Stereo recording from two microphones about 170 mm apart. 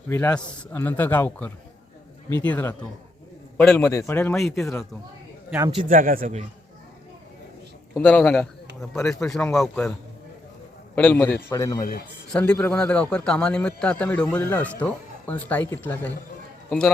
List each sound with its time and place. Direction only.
0.1 s speech: 10° left (ahead or behind)
5.8 s a man's voice: 55° right (ahead or behind)
7.9 s speech: 10° left (ahead or behind)
10.9 s speech: 10° left (ahead or behind)
11.8 s speech: 60° left (ahead or behind)
12.3 s a man's voice: 5° left (ahead or behind)